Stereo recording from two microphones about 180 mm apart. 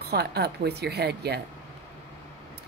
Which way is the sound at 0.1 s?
65° right (ahead or behind).